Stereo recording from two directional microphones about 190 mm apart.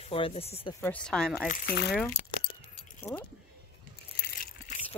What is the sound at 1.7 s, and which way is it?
Speech, 60° left (ahead or behind).